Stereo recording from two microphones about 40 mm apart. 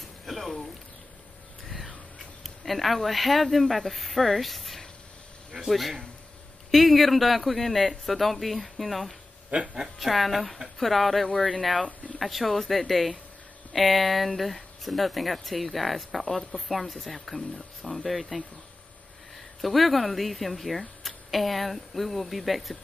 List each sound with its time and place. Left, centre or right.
0.3 s a sound: centre
2.1 s speech: centre
11.3 s speech: centre
12.2 s speech: centre